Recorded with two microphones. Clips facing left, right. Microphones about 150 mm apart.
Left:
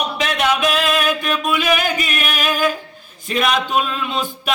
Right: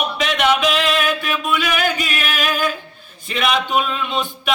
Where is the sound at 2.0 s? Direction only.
5° left (ahead or behind).